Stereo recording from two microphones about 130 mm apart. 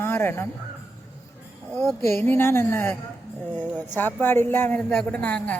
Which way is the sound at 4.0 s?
15° left (ahead or behind).